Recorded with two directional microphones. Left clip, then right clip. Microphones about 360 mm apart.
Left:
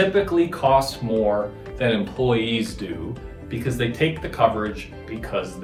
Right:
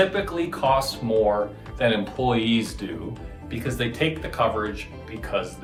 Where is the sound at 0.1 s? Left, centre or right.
Centre.